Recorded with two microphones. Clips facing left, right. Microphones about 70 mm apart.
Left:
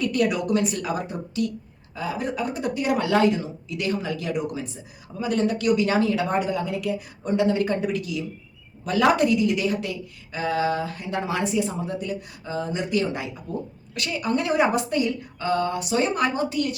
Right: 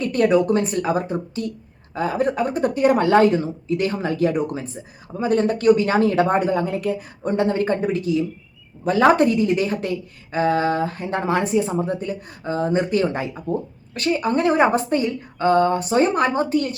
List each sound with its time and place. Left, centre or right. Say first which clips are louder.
0.0 s speech: right 6 dB; right
2.0 s speech: right 7 dB; right